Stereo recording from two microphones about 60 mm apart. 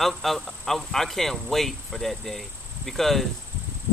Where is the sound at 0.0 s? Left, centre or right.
Centre.